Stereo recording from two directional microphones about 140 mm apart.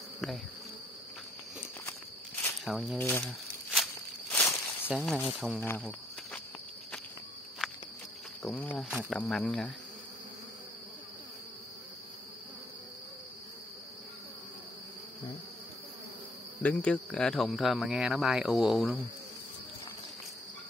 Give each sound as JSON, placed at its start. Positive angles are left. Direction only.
{"t": 2.6, "sound": "speech", "side_deg": 0}
{"t": 3.0, "sound": "speech", "side_deg": 15}
{"t": 3.7, "sound": "walk", "side_deg": 0}
{"t": 4.4, "sound": "a sound", "side_deg": 15}
{"t": 5.1, "sound": "speech", "side_deg": -5}
{"t": 5.6, "sound": "cricket", "side_deg": 15}
{"t": 7.6, "sound": "insect", "side_deg": -5}
{"t": 8.7, "sound": "speech", "side_deg": -5}
{"t": 9.2, "sound": "speech", "side_deg": 10}
{"t": 16.6, "sound": "speech", "side_deg": 10}